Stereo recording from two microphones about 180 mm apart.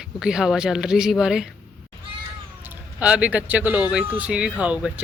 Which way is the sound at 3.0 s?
5° right (ahead or behind).